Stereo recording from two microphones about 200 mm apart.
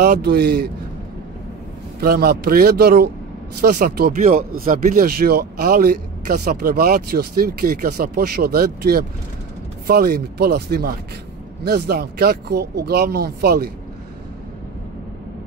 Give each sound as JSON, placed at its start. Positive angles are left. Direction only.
{"t": 0.0, "sound": "speech", "side_deg": -55}
{"t": 2.0, "sound": "speech", "side_deg": -50}